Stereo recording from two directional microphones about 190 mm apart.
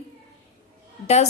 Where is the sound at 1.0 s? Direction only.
35° left (ahead or behind).